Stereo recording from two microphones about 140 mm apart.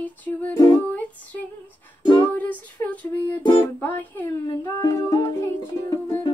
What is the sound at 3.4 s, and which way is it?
Music, 15° left (ahead or behind).